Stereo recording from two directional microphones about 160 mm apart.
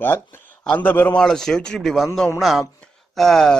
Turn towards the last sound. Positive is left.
turn(degrees=0)  # may be behind; listen again after turning